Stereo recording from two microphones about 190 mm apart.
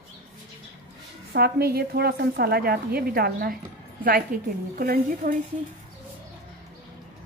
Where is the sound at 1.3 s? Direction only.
55° right (ahead or behind).